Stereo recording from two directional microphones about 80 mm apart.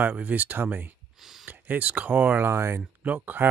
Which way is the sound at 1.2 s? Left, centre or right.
Centre.